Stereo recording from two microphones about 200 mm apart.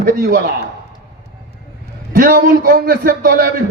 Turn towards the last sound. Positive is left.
turn(degrees=-45)  # may be behind; listen again after turning